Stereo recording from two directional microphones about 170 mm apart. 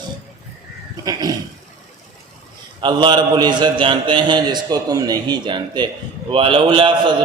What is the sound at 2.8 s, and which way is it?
A man's voice, 30° right (ahead or behind).